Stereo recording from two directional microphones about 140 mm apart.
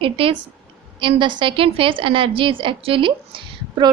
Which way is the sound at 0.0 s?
40° right (ahead or behind).